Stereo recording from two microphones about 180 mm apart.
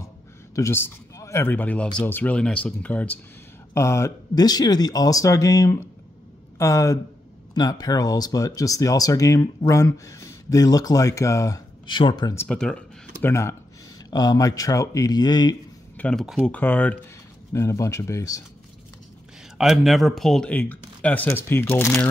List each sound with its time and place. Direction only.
0.6 s speech: 15° left (ahead or behind)
12.4 s speech: 5° left (ahead or behind); by 15.5 s 25° left (ahead or behind)
16.0 s speech: 5° left (ahead or behind)
19.6 s speech: centre (ahead or behind)